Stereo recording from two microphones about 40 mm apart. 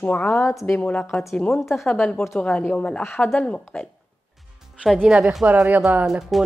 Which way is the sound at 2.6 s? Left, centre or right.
Left.